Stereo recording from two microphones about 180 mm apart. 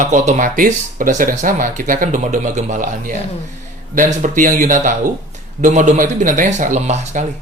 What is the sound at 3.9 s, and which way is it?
Speech, 45° right (ahead or behind).